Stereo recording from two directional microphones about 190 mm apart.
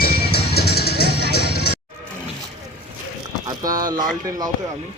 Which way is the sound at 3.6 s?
20° right (ahead or behind).